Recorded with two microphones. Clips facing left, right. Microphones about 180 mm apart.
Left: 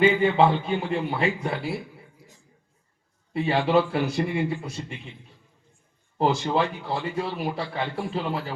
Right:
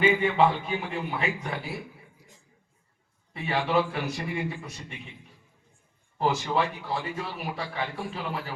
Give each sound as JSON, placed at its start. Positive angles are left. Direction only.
{"t": 0.0, "sound": "a man's voice", "side_deg": 30}
{"t": 3.3, "sound": "a man's voice", "side_deg": 30}
{"t": 6.1, "sound": "a man's voice", "side_deg": 30}